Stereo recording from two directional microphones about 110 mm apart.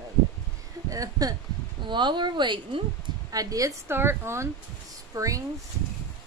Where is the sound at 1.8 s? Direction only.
45° right (ahead or behind).